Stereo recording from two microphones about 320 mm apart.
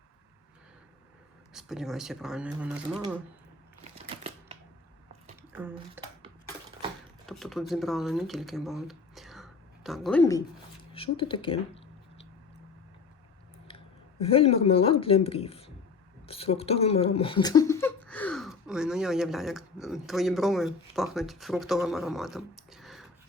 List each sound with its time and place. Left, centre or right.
1.5 s speech: centre
5.4 s a sound: centre
6.0 s dishes: centre
7.3 s speech: centre
13.7 s speech: centre